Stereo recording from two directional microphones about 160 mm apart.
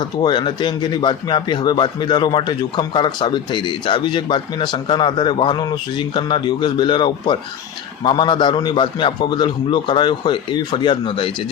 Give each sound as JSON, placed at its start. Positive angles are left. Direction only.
{"t": 0.2, "sound": "a man's voice", "side_deg": 30}